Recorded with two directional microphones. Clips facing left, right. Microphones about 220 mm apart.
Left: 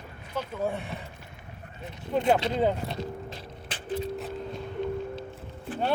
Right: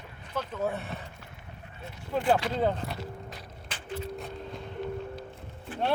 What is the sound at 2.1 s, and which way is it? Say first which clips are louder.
Speech: left 2 dB; 20° left (ahead or behind).